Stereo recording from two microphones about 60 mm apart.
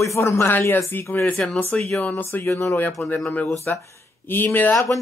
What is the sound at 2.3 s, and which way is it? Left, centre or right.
Speech, left.